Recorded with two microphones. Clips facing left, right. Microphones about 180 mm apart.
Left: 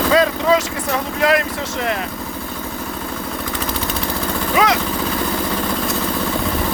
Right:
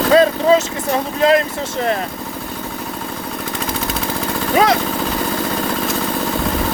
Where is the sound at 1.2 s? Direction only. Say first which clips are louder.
Right 3 dB; 30° right (ahead or behind).